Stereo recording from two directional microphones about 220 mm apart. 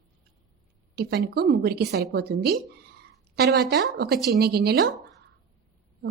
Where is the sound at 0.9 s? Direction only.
45° right (ahead or behind).